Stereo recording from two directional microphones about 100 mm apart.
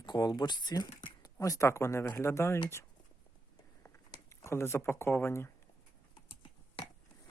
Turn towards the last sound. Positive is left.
turn(degrees=50)  # may be behind; listen again after turning